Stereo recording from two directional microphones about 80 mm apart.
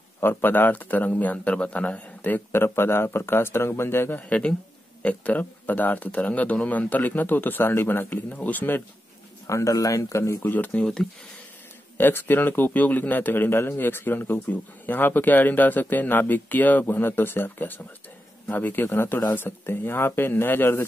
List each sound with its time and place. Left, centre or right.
0.2 s a man's voice: left
4.3 s a man's voice: centre
9.5 s speech: left
10.4 s a man's voice: left
12.0 s a man's voice: left